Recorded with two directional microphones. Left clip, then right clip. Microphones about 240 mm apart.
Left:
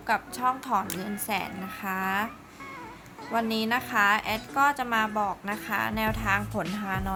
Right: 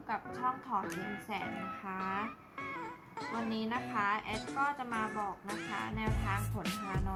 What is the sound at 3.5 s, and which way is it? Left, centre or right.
A woman's voice, left.